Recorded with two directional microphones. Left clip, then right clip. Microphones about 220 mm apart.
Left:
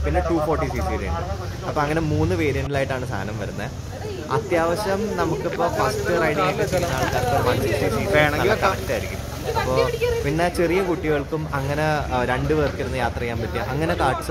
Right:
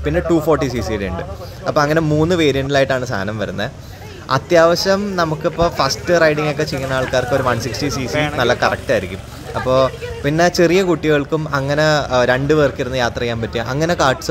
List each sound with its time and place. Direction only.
0.0 s speech: 25° right (ahead or behind)
4.3 s speech: 25° right (ahead or behind)
8.1 s speech: 5° right (ahead or behind)
8.4 s speech: 20° right (ahead or behind)